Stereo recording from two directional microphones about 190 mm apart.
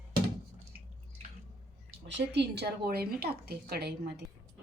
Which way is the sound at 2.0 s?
65° right (ahead or behind).